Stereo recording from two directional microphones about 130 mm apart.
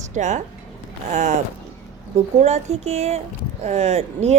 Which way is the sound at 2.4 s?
55° right (ahead or behind).